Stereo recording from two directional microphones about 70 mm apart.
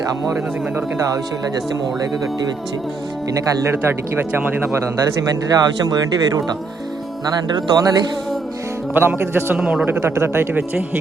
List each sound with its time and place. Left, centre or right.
3.3 s a man's voice: right
5.5 s speech: right
9.0 s a man's voice: right
9.6 s speech: centre
10.0 s a man's voice: right